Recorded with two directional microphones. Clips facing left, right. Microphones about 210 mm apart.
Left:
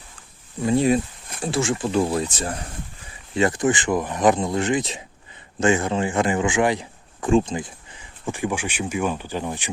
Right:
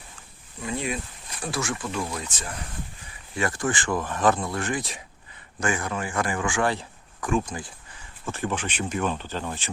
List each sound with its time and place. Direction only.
0.6 s speech: 35° left (ahead or behind)
3.3 s speech: 20° left (ahead or behind)